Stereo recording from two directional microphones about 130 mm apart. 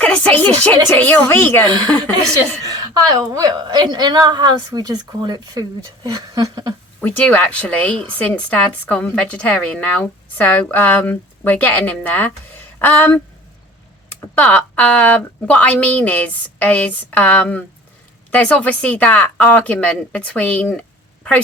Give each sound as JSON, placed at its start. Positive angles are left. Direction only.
{"t": 0.0, "sound": "speech", "side_deg": 10}
{"t": 2.6, "sound": "a woman's voice", "side_deg": -30}
{"t": 7.0, "sound": "speech", "side_deg": 15}